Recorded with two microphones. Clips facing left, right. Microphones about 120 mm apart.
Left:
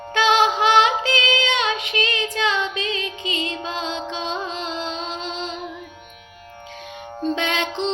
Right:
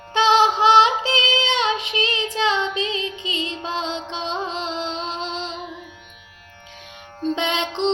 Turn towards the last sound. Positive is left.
turn(degrees=-20)  # may be behind; listen again after turning